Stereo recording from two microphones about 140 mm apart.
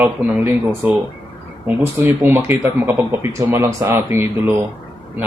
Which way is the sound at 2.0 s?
15° right (ahead or behind).